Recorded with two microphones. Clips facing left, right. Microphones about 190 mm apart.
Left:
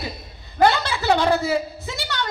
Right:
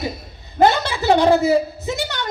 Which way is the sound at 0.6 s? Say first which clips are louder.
Right 3 dB; 20° right (ahead or behind).